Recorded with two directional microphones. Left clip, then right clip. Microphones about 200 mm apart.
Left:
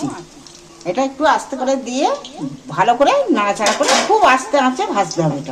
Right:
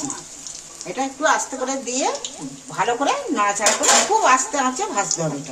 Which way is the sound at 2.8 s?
50° left (ahead or behind).